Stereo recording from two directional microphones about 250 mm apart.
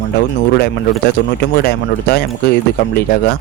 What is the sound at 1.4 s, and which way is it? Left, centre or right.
Speech, left.